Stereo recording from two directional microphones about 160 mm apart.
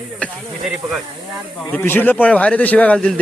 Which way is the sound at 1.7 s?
15° left (ahead or behind).